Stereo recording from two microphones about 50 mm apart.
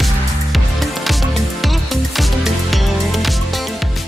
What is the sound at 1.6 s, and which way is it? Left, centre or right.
Music, centre.